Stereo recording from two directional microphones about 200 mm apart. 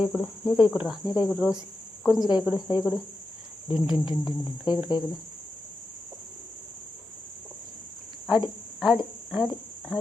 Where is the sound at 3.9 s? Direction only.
25° left (ahead or behind).